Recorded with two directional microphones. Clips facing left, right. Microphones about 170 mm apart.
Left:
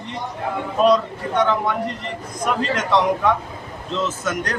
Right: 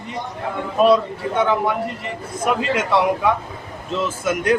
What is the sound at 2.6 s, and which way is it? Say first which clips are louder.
Speech: left 1 dB; 10° right (ahead or behind).